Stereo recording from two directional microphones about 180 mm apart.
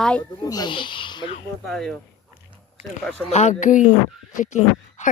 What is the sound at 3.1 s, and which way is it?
Speech, 5° left (ahead or behind).